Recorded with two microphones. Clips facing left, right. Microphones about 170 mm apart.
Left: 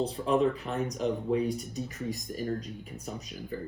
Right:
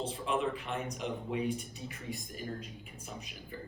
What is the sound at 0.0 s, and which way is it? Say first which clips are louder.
Speech: left 7 dB; 40° left (ahead or behind).